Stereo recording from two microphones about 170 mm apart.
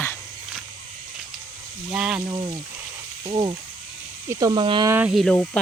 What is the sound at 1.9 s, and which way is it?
Speech, 5° right (ahead or behind).